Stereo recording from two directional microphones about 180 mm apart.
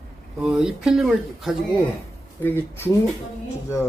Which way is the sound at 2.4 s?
10° left (ahead or behind).